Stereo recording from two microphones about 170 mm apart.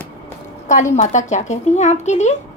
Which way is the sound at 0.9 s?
45° left (ahead or behind).